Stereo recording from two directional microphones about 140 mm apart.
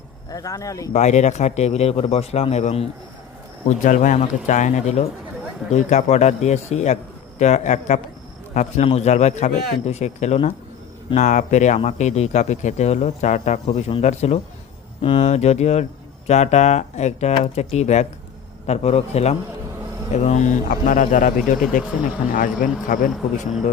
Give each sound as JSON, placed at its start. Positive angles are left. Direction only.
{"t": 0.3, "sound": "speech", "side_deg": 25}
{"t": 0.9, "sound": "speech", "side_deg": 55}
{"t": 3.7, "sound": "a man's voice", "side_deg": 60}
{"t": 20.7, "sound": "a man's voice", "side_deg": 70}
{"t": 22.3, "sound": "speech", "side_deg": 80}